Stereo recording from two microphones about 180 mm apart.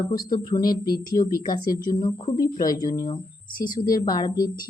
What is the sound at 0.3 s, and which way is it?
A woman's voice, 20° left (ahead or behind).